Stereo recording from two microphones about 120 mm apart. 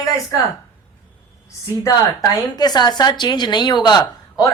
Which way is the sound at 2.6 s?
35° left (ahead or behind).